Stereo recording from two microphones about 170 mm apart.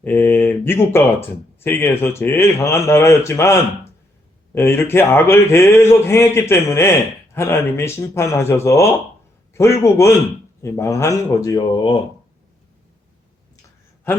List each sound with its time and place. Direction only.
0.0 s a man's voice: 10° left (ahead or behind)
4.5 s a man's voice: 15° left (ahead or behind)